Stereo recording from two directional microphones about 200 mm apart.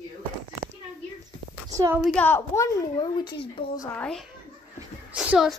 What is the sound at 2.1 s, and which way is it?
A woman's voice, 10° left (ahead or behind).